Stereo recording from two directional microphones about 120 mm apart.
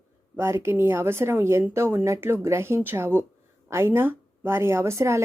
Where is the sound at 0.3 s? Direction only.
20° right (ahead or behind).